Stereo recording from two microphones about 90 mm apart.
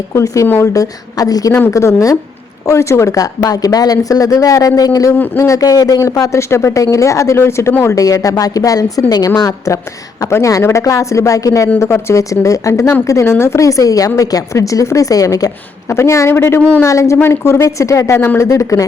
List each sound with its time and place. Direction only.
0.1 s a woman's voice: 35° left (ahead or behind)
0.7 s a woman's voice: 40° left (ahead or behind)
5.1 s speech: 20° left (ahead or behind)
5.4 s a woman's voice: 40° left (ahead or behind)
7.9 s a woman's voice: 40° left (ahead or behind)